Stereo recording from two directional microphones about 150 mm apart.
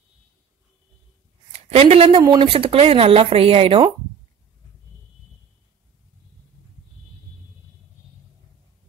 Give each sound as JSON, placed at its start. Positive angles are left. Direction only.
{"t": 1.5, "sound": "a woman's voice", "side_deg": -40}